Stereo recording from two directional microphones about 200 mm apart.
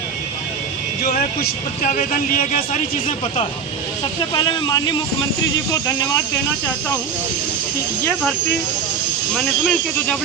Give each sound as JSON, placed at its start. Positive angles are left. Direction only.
{"t": 1.0, "sound": "speech", "side_deg": 45}
{"t": 4.4, "sound": "speech", "side_deg": 20}
{"t": 8.0, "sound": "speech", "side_deg": 5}